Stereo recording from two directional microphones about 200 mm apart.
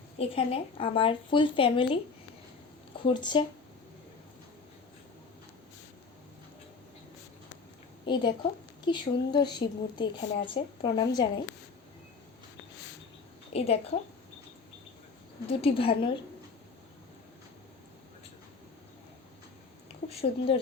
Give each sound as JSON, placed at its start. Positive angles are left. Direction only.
{"t": 0.2, "sound": "speech", "side_deg": 30}
{"t": 3.1, "sound": "speech", "side_deg": 25}
{"t": 8.0, "sound": "a woman's voice", "side_deg": 20}
{"t": 10.2, "sound": "speech", "side_deg": 35}
{"t": 10.5, "sound": "speech", "side_deg": 20}
{"t": 13.5, "sound": "a woman's voice", "side_deg": 30}
{"t": 15.4, "sound": "speech", "side_deg": 30}
{"t": 20.1, "sound": "speech", "side_deg": 30}